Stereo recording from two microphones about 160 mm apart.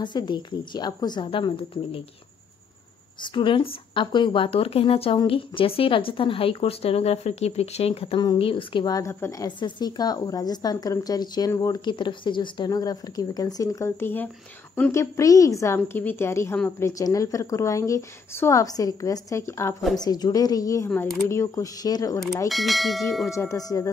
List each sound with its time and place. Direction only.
0.0 s a woman's voice: 30° left (ahead or behind)
3.2 s a woman's voice: 30° left (ahead or behind)
22.5 s bell: centre (ahead or behind)
23.3 s a woman's voice: 20° left (ahead or behind)